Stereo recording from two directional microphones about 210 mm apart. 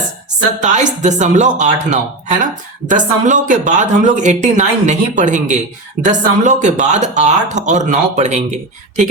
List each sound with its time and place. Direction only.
0.6 s speech: 35° right (ahead or behind)